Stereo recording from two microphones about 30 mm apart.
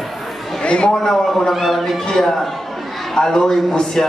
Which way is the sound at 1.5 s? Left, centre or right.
Centre.